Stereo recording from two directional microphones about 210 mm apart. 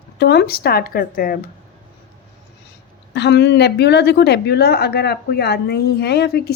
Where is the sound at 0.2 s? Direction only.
50° left (ahead or behind).